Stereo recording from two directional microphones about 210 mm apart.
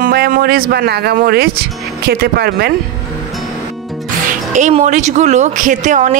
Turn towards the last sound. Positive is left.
turn(degrees=-35)  # may be behind; listen again after turning